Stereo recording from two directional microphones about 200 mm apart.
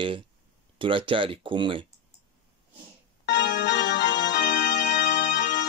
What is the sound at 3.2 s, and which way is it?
Music, 60° left (ahead or behind).